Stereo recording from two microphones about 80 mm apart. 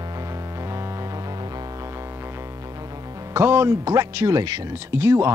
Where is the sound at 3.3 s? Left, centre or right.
Right.